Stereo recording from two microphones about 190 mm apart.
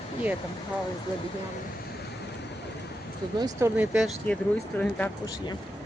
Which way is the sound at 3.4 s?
15° right (ahead or behind).